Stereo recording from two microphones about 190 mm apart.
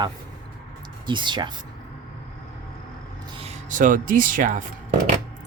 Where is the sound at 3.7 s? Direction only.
45° right (ahead or behind).